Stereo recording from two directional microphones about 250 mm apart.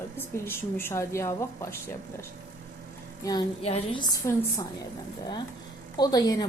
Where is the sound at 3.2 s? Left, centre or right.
Left.